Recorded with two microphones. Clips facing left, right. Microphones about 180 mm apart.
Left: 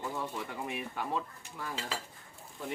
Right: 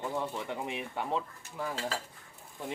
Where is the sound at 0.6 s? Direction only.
20° right (ahead or behind).